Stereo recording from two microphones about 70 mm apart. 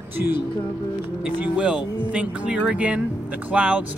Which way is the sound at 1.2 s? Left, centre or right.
Centre.